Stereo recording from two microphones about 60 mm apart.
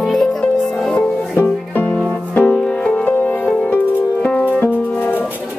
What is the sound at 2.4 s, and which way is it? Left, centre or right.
Music, centre.